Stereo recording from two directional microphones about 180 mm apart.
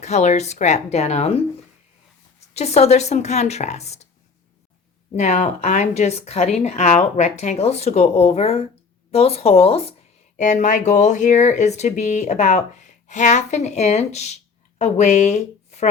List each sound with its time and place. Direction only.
0.0 s speech: 40° left (ahead or behind)
2.6 s speech: 35° left (ahead or behind)
5.1 s speech: 40° left (ahead or behind)